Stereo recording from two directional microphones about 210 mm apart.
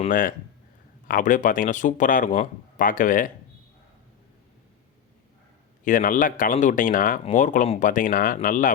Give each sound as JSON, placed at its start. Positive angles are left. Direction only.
{"t": 0.0, "sound": "speech", "side_deg": 40}
{"t": 5.8, "sound": "speech", "side_deg": 40}